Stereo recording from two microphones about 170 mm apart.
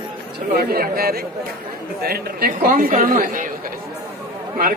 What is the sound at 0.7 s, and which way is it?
Speech, 60° right (ahead or behind).